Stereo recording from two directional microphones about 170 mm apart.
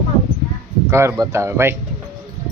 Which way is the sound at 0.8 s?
15° right (ahead or behind).